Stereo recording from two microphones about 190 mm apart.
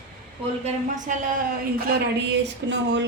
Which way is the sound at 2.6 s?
65° right (ahead or behind).